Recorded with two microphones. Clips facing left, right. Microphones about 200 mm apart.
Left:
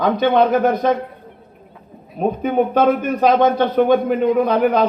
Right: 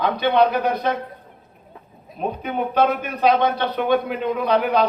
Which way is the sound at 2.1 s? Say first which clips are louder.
Left 8 dB; 45° left (ahead or behind).